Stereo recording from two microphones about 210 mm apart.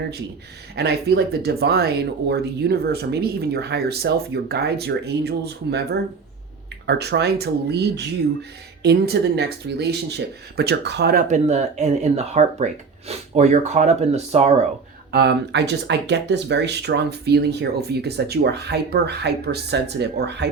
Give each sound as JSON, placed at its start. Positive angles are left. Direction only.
{"t": 0.8, "sound": "speech", "side_deg": -50}
{"t": 15.1, "sound": "speech", "side_deg": -55}